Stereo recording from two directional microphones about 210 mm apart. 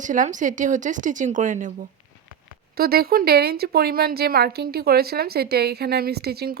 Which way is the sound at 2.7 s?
45° right (ahead or behind).